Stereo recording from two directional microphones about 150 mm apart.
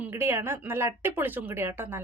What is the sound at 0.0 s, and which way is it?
Speech, 15° right (ahead or behind).